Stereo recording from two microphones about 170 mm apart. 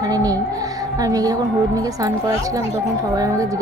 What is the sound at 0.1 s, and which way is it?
Music, 20° right (ahead or behind).